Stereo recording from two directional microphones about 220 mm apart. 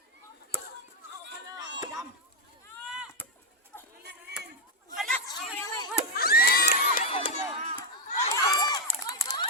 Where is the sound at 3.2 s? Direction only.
10° left (ahead or behind).